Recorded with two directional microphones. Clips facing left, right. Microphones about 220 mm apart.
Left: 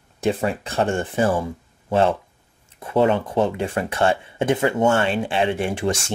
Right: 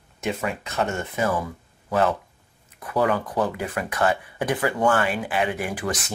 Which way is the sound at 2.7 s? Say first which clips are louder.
Left 4 dB; 25° left (ahead or behind).